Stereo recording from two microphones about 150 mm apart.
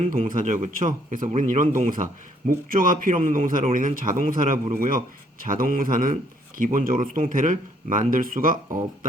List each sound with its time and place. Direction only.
0.3 s speech: 60° right (ahead or behind)